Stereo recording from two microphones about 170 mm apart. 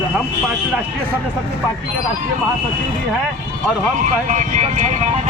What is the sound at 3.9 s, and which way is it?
Speech, 50° right (ahead or behind).